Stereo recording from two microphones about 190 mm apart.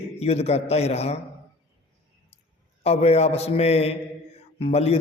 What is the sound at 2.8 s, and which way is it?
A man's voice, 35° left (ahead or behind).